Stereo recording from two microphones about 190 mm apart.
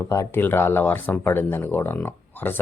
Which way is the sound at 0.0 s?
15° left (ahead or behind).